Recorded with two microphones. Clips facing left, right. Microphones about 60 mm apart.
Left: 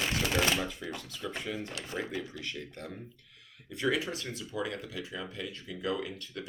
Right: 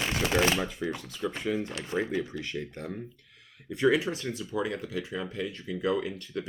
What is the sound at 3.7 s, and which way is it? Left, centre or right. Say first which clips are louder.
Speech: right 6 dB; right.